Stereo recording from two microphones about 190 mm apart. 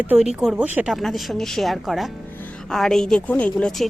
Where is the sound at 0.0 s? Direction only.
5° right (ahead or behind).